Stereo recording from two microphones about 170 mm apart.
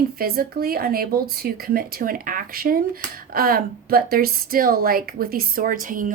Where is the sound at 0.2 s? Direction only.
60° right (ahead or behind).